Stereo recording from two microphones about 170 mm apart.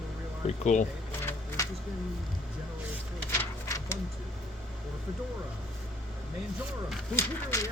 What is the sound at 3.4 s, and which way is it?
Sewing machine, 15° left (ahead or behind).